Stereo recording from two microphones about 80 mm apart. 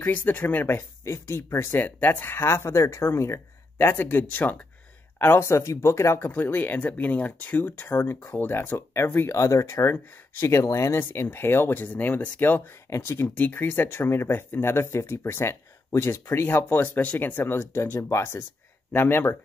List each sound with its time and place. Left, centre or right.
0.0 s speech: left
9.4 s speech: left